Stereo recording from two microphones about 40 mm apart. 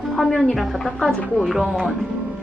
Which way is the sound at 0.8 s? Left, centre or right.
Centre.